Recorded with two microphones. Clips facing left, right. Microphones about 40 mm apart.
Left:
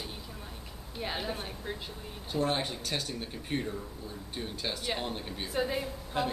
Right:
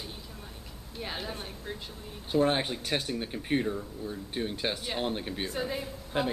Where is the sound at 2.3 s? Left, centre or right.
Right.